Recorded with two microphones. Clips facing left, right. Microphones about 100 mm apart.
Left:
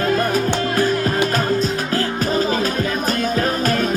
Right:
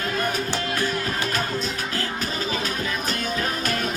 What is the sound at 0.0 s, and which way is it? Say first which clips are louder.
Music: left 8 dB; 40° left (ahead or behind).